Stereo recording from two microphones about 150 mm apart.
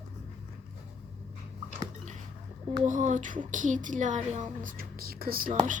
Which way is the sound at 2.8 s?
55° right (ahead or behind).